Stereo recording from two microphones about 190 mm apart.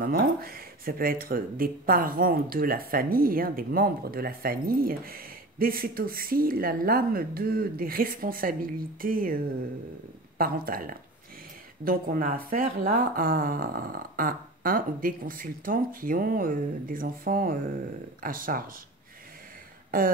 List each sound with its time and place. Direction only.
0.0 s speech: 50° right (ahead or behind)